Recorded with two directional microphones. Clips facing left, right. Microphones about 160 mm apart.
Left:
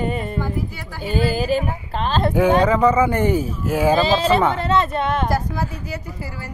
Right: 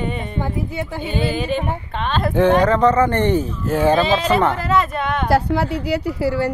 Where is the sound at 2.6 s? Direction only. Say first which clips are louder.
Right 1 dB; 10° left (ahead or behind).